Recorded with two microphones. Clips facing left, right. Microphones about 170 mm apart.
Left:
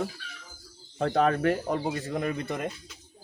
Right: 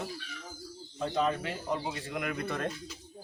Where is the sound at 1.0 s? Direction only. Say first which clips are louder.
Left 6 dB; 65° left (ahead or behind); by 2.5 s 30° left (ahead or behind).